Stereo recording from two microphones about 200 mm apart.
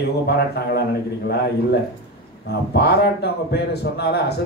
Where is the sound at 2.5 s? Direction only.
55° left (ahead or behind).